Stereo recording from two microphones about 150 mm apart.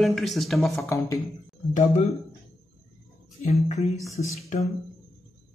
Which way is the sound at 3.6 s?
50° left (ahead or behind).